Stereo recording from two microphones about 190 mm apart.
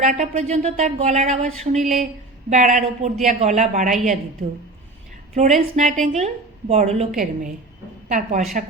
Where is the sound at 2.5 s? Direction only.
40° right (ahead or behind).